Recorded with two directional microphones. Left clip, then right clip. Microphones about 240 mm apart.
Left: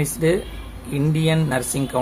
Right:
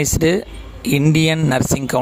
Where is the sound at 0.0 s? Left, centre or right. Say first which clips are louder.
Right 4 dB; right.